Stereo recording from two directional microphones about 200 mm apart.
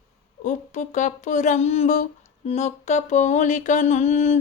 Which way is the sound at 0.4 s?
40° left (ahead or behind).